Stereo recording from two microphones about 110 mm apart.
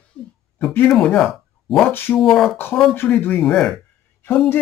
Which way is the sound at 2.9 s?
20° left (ahead or behind).